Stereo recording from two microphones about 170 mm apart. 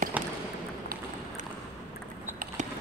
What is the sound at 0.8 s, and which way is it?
Run, 55° right (ahead or behind).